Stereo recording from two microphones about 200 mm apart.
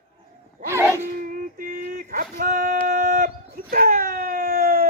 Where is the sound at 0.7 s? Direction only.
15° right (ahead or behind).